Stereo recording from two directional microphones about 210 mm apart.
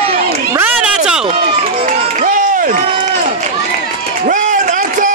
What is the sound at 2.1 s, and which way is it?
Run, 40° right (ahead or behind).